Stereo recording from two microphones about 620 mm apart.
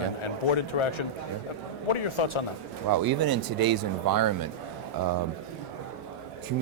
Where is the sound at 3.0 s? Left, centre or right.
Right.